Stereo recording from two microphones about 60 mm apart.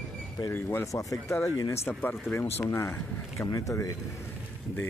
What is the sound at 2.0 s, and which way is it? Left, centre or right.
Speech, left.